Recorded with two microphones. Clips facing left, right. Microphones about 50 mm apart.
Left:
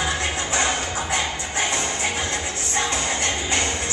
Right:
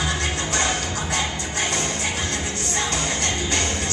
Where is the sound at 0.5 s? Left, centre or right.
Centre.